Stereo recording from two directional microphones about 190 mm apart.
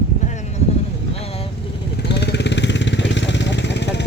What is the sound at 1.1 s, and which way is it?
Vehicle, 30° left (ahead or behind).